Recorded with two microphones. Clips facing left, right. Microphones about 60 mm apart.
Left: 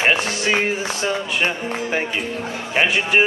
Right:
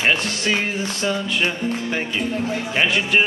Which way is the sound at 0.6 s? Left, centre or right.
Centre.